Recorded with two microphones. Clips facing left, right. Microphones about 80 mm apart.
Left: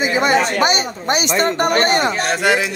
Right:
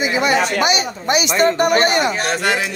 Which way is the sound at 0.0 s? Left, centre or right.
Left.